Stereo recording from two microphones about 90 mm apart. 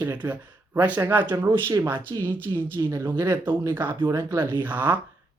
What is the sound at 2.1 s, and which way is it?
Speech, 50° right (ahead or behind).